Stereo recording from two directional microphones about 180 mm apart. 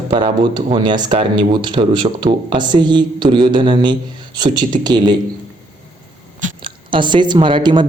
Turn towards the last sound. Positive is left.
turn(degrees=-25)  # may be behind; listen again after turning